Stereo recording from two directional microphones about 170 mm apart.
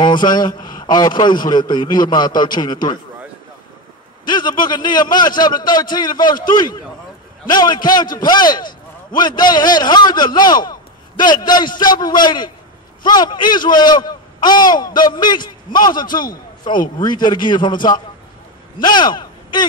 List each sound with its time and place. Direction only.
0.0 s a man's voice: 25° left (ahead or behind)
4.3 s a man's voice: 25° left (ahead or behind)